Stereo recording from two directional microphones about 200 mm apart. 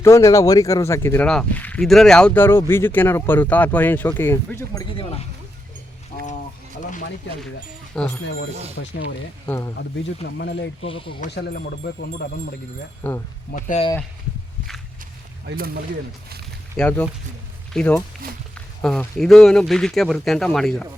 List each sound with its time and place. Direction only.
0.0 s speech: 15° left (ahead or behind)
6.1 s a sound: 35° left (ahead or behind)
7.9 s speech: 5° left (ahead or behind)
8.8 s speech: 70° left (ahead or behind)
9.5 s speech: 15° left (ahead or behind)
10.3 s speech: 60° left (ahead or behind)
10.8 s speech: 25° left (ahead or behind)
13.0 s speech: 10° left (ahead or behind)
13.5 s speech: 40° left (ahead or behind)
15.4 s speech: 50° right (ahead or behind)
16.7 s speech: 5° left (ahead or behind)